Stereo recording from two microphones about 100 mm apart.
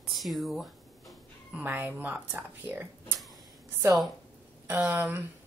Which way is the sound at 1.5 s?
15° right (ahead or behind).